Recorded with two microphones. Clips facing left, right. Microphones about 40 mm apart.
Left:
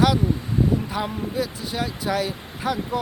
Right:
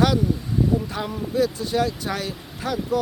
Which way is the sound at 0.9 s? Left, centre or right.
Centre.